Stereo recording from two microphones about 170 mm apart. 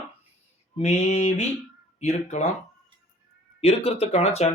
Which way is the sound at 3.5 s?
35° left (ahead or behind).